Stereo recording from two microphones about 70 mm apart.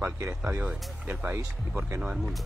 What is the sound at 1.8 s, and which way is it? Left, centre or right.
Speech, centre.